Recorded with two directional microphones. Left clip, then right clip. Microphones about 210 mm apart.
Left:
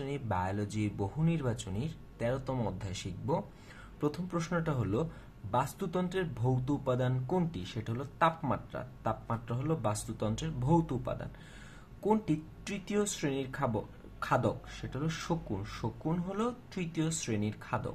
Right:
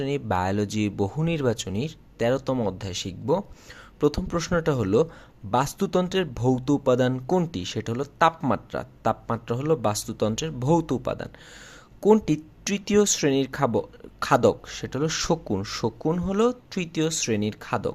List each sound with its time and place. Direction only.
0.0 s speech: 40° right (ahead or behind)